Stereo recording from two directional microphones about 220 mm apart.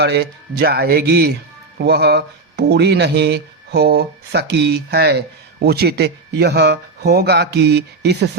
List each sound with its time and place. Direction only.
0.0 s speech: 50° right (ahead or behind)